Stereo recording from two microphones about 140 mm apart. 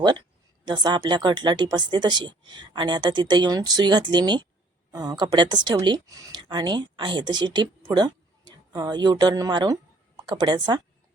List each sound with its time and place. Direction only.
0.6 s speech: 30° right (ahead or behind)